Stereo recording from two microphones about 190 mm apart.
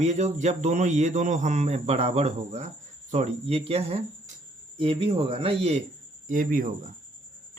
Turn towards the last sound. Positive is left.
turn(degrees=-45)  # may be behind; listen again after turning